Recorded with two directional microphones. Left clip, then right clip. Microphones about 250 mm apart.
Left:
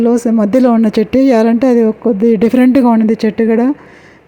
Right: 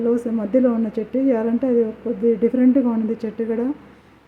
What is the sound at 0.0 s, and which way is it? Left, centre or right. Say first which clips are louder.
Speech: left 9 dB; left.